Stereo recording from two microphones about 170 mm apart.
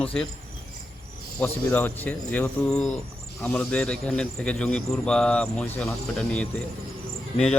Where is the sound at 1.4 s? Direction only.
10° left (ahead or behind).